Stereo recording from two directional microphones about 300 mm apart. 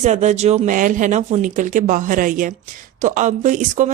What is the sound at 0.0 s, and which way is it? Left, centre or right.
Speech, right.